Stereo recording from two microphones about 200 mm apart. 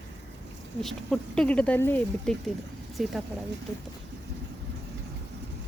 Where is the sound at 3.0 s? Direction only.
Centre (ahead or behind).